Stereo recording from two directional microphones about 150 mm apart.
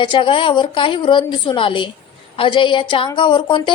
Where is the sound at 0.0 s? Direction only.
35° left (ahead or behind).